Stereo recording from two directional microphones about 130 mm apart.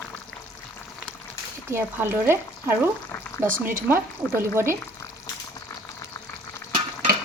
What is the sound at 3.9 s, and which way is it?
Speech, 20° right (ahead or behind).